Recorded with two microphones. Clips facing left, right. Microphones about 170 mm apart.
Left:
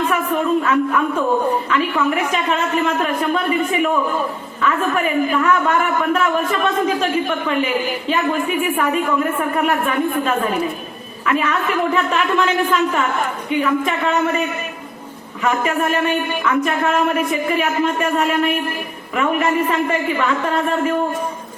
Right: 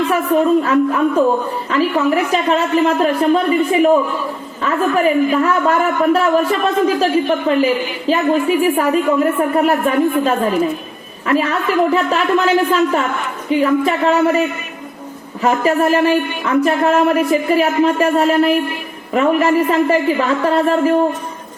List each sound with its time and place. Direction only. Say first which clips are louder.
0.6 s a man's voice: right 3 dB; 35° right (ahead or behind)